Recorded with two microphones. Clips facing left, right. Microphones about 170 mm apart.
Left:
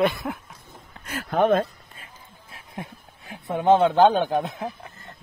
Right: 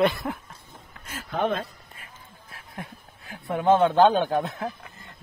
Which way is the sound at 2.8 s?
25° left (ahead or behind).